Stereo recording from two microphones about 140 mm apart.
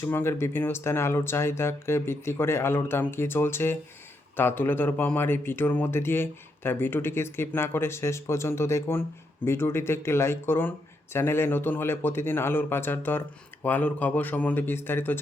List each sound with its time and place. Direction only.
0.0 s speech: 20° left (ahead or behind)